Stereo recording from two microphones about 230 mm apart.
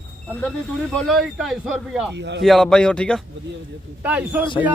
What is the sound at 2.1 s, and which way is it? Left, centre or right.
Speech, right.